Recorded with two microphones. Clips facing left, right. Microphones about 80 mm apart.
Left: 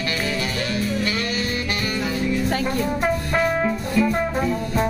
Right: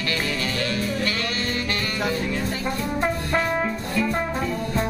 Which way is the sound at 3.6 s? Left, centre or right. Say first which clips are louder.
Left 4 dB; centre.